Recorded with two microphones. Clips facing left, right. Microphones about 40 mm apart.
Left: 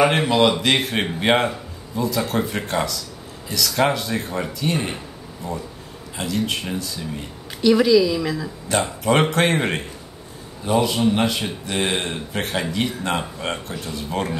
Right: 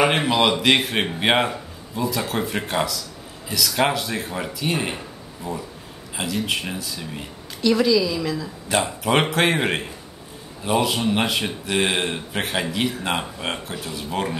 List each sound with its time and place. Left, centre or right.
0.0 s speech: centre
7.6 s a woman's voice: centre
8.6 s speech: centre